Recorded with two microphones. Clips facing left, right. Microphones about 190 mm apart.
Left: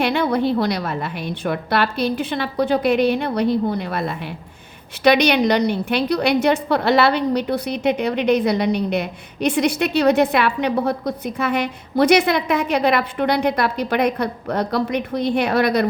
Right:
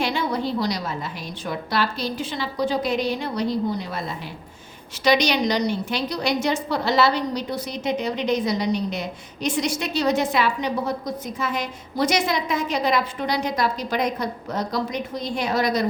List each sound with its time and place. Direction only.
0.0 s a woman's voice: 60° left (ahead or behind)